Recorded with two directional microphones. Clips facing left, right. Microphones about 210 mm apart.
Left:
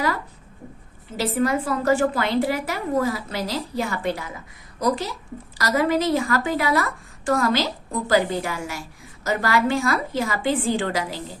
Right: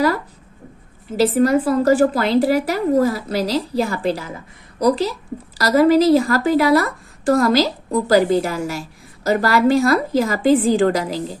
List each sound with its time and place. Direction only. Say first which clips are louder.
1.2 s a woman's voice: right 7 dB; 35° right (ahead or behind)